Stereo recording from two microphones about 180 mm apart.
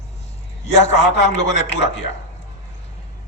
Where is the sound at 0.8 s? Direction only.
40° left (ahead or behind).